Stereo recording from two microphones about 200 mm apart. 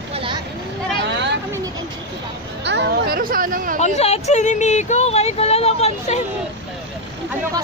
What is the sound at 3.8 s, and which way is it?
Speech, 35° left (ahead or behind).